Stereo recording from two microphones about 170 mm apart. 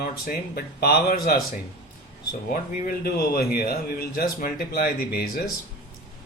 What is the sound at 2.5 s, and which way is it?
A man's voice, 60° left (ahead or behind).